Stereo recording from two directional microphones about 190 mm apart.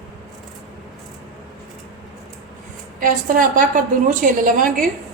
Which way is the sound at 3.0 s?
45° right (ahead or behind).